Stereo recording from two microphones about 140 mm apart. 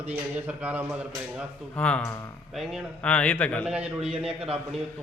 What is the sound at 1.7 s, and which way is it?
Speech, 10° left (ahead or behind).